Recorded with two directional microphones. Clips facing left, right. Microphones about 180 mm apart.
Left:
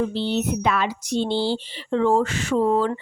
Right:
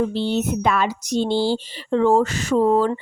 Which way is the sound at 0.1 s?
45° right (ahead or behind).